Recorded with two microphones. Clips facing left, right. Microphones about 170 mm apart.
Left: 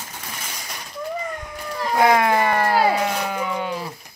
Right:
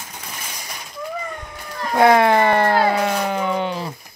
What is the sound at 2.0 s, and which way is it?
Siren, 30° right (ahead or behind).